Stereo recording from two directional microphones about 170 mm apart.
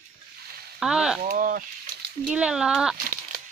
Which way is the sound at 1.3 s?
55° right (ahead or behind).